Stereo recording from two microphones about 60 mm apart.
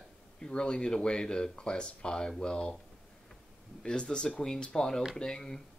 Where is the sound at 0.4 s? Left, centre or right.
Centre.